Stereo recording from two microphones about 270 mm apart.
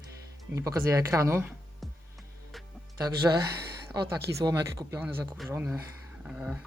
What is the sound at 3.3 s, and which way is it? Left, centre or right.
Speech, centre.